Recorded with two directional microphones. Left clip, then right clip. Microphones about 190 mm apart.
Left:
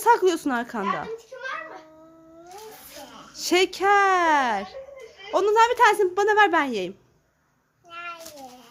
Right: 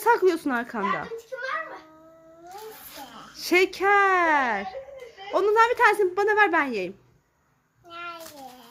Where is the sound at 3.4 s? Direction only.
Centre (ahead or behind).